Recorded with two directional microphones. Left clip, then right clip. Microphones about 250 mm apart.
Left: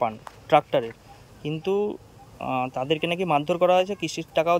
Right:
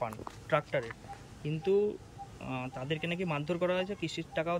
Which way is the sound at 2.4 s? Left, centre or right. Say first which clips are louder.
Left 14 dB; left.